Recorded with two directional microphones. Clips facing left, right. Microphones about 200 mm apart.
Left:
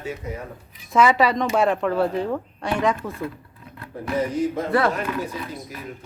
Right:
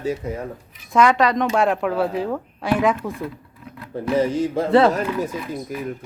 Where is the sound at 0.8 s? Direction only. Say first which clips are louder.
Right 1 dB; centre (ahead or behind).